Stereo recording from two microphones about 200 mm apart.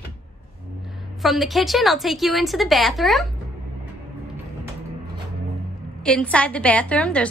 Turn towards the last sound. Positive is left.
turn(degrees=5)  # may be behind; listen again after turning